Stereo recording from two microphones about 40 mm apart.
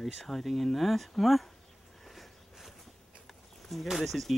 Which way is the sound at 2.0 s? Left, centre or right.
Centre.